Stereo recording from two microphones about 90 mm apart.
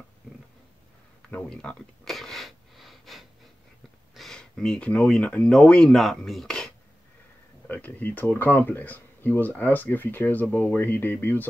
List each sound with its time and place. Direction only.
1.5 s speech: 10° left (ahead or behind)
2.0 s wheeze: centre (ahead or behind)
4.1 s a sound: 5° left (ahead or behind)
5.0 s speech: 5° left (ahead or behind)
7.6 s speech: 20° left (ahead or behind)